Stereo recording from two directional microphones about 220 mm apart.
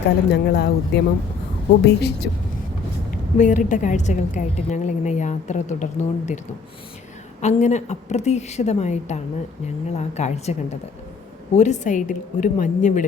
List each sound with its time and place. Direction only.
0.3 s speech: 45° left (ahead or behind)
3.1 s a woman's voice: 35° left (ahead or behind)
7.4 s a woman's voice: 30° left (ahead or behind)